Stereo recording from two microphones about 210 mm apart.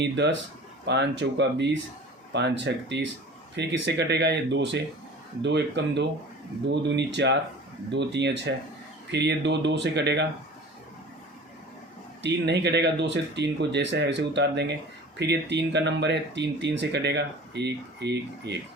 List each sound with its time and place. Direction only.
0.0 s speech: 55° right (ahead or behind)
12.2 s speech: 55° right (ahead or behind)